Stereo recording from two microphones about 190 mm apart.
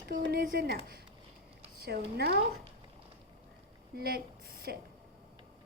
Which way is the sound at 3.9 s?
55° right (ahead or behind).